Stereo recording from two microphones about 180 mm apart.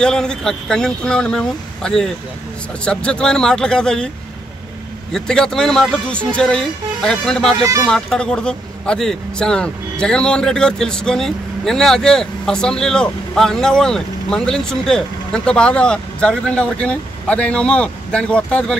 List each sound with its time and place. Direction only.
0.0 s speech: 5° left (ahead or behind)
5.1 s speech: 5° left (ahead or behind)